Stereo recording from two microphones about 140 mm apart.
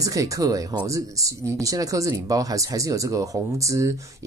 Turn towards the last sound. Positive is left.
turn(degrees=-20)  # may be behind; listen again after turning